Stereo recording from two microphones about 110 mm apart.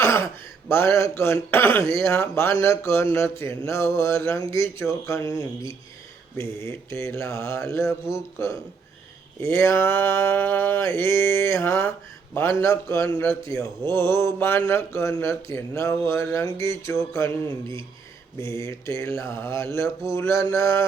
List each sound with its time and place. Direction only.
0.0 s a sound: 20° left (ahead or behind)
0.7 s a man's voice: 25° left (ahead or behind)
18.3 s a man's voice: 25° left (ahead or behind)